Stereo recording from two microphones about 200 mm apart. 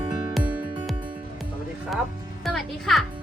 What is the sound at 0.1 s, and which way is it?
Music, 20° right (ahead or behind).